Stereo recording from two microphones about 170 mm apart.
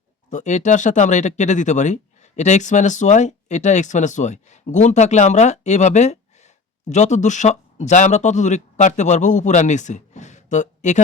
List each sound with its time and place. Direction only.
0.3 s speech: 45° left (ahead or behind)